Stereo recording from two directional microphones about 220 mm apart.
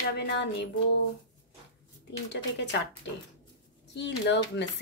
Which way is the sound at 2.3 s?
55° left (ahead or behind).